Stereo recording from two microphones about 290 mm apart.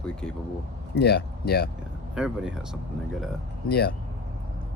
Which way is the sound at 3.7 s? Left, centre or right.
Left.